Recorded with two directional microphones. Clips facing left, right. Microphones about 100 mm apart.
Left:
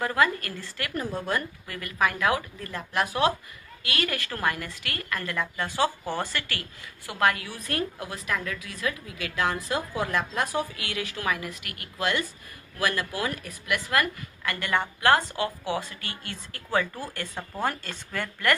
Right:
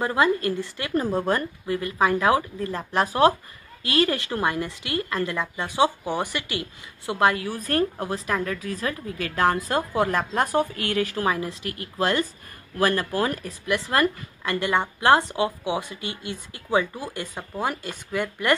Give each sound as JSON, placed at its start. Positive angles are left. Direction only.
{"t": 0.0, "sound": "a woman's voice", "side_deg": -25}
{"t": 0.9, "sound": "a woman's voice", "side_deg": -35}
{"t": 7.5, "sound": "a woman's voice", "side_deg": -40}
{"t": 10.0, "sound": "a woman's voice", "side_deg": -40}